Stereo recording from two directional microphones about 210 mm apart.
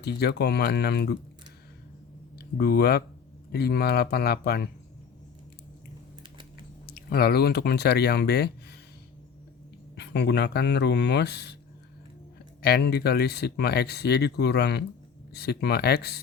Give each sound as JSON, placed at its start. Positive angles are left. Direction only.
{"t": 0.0, "sound": "speech", "side_deg": 50}
{"t": 2.6, "sound": "speech", "side_deg": 50}
{"t": 6.8, "sound": "speech", "side_deg": 45}
{"t": 9.9, "sound": "speech", "side_deg": 55}
{"t": 12.6, "sound": "speech", "side_deg": 50}